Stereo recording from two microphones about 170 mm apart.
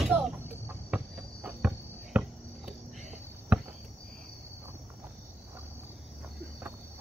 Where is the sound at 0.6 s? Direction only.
10° right (ahead or behind).